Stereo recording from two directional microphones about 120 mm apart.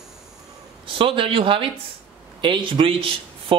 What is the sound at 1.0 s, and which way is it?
Speech, 45° right (ahead or behind).